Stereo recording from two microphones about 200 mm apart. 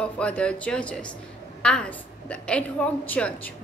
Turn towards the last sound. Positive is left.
turn(degrees=5)  # may be behind; listen again after turning